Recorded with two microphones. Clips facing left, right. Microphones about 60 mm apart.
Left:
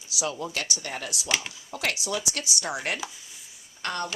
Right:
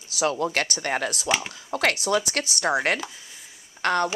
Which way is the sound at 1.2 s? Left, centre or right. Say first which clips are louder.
Even; centre.